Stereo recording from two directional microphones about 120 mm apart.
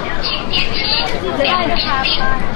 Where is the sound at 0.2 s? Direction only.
15° left (ahead or behind).